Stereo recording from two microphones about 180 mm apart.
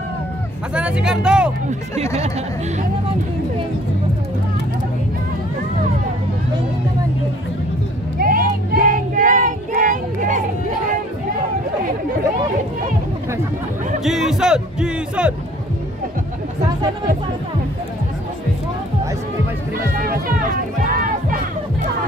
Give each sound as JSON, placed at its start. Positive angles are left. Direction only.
{"t": 0.7, "sound": "speech", "side_deg": -5}
{"t": 8.2, "sound": "child singing", "side_deg": -55}
{"t": 14.0, "sound": "speech", "side_deg": 0}
{"t": 20.8, "sound": "music", "side_deg": -50}